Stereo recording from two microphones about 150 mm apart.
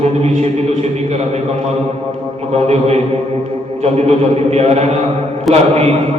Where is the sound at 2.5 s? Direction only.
45° right (ahead or behind).